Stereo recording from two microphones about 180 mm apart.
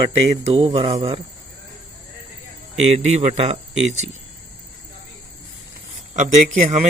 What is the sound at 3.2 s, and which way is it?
Speech, 35° right (ahead or behind).